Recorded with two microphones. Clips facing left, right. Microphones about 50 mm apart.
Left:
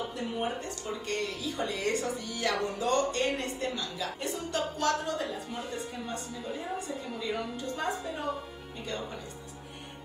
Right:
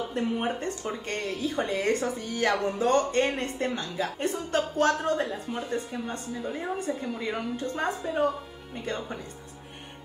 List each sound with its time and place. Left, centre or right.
0.1 s a woman's voice: right
6.8 s a woman's voice: right